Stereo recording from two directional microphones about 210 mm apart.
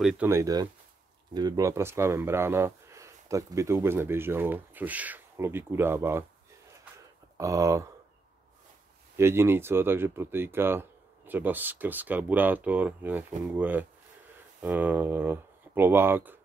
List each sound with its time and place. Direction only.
0.0 s speech: 10° right (ahead or behind)
7.3 s speech: 15° right (ahead or behind)
9.1 s speech: 10° right (ahead or behind)